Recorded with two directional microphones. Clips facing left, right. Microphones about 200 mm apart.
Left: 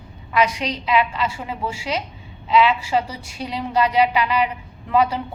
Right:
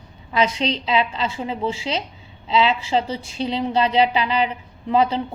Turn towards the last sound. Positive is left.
turn(degrees=-25)  # may be behind; listen again after turning